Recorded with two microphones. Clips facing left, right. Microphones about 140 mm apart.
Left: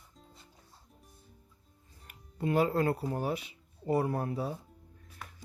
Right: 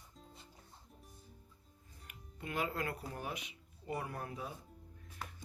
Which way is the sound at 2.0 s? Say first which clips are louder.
Left 13 dB; 35° left (ahead or behind).